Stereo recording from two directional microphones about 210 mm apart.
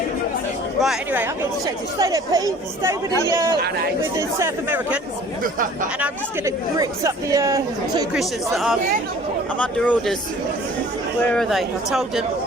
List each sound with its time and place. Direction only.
0.8 s speech: 5° right (ahead or behind)
4.2 s speech: 15° right (ahead or behind)
5.4 s speech: 40° right (ahead or behind)
6.0 s speech: 15° right (ahead or behind)
8.1 s speech: centre (ahead or behind)
11.2 s speech: 5° left (ahead or behind)